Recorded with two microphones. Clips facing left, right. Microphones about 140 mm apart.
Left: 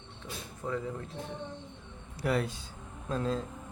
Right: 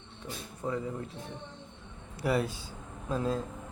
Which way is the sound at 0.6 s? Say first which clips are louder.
Right 1 dB; 20° right (ahead or behind).